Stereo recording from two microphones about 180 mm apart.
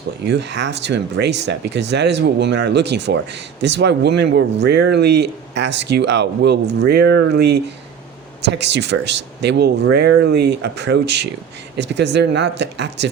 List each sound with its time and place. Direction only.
0.3 s speech: 75° right (ahead or behind)